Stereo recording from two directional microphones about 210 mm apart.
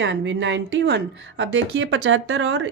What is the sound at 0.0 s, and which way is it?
Speech, 60° right (ahead or behind).